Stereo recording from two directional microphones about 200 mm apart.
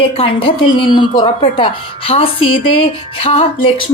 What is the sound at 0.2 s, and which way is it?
A woman's voice, 25° left (ahead or behind).